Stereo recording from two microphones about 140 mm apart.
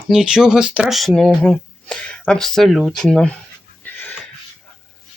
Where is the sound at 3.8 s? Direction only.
10° left (ahead or behind).